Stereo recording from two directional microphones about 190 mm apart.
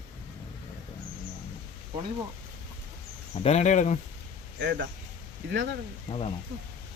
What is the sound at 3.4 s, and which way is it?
Speech, 35° left (ahead or behind).